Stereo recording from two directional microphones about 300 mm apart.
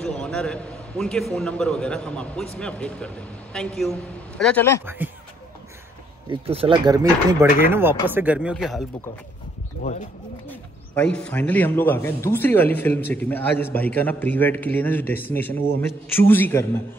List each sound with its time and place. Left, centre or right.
0.0 s a man's voice: centre
4.8 s a man's voice: centre
6.3 s a man's voice: centre
9.8 s speech: left
10.4 s a man's voice: centre